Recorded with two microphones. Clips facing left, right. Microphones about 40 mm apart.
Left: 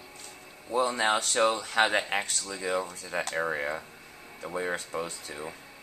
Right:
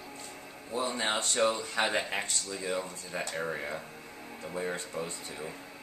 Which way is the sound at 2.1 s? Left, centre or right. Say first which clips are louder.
Left 3 dB; left.